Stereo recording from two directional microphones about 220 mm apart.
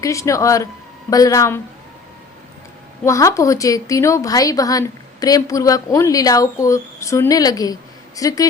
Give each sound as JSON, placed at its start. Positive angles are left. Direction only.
{"t": 0.0, "sound": "a woman's voice", "side_deg": 15}
{"t": 3.0, "sound": "a woman's voice", "side_deg": 15}